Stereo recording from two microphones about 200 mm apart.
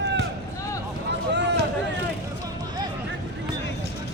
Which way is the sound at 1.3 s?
60° right (ahead or behind).